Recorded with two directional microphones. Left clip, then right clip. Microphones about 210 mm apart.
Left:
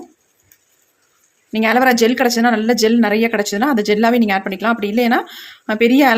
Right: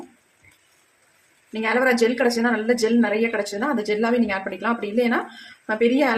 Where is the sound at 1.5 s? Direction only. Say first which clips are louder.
Left 6 dB; 45° left (ahead or behind).